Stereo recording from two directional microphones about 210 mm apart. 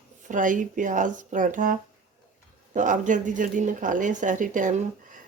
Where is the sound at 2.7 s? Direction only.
35° right (ahead or behind).